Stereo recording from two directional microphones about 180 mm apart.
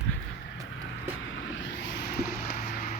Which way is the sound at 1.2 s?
90° left.